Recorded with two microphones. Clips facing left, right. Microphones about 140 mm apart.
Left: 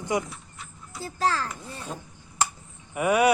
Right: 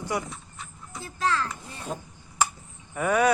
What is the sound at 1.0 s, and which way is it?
Speech, 35° left (ahead or behind).